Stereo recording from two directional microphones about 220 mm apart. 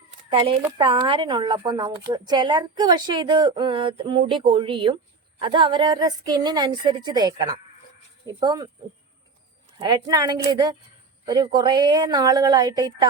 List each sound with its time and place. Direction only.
0.3 s a woman's voice: 20° right (ahead or behind)
9.7 s a woman's voice: 20° right (ahead or behind)